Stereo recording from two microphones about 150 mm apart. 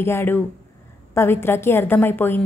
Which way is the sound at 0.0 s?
15° left (ahead or behind).